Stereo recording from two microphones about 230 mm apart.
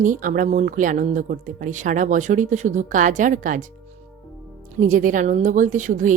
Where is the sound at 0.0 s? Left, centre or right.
Right.